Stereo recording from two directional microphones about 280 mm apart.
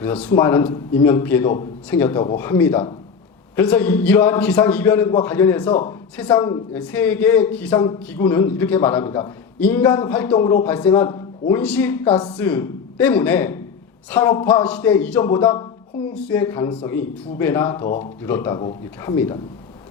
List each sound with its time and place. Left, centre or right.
0.0 s a man's voice: centre
6.7 s a man's voice: centre